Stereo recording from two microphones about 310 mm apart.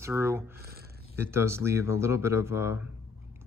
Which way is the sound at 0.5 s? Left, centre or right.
Right.